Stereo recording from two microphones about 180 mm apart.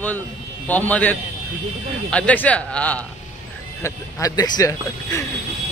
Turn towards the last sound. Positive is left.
turn(degrees=15)  # may be behind; listen again after turning